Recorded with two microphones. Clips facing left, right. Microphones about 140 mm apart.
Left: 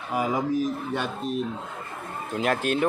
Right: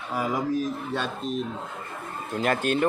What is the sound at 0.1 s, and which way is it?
Speech, 20° left (ahead or behind).